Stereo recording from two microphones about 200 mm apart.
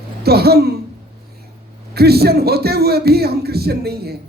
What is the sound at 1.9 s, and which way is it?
A man's voice, 50° right (ahead or behind).